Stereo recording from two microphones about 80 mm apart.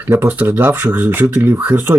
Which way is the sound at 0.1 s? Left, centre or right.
Right.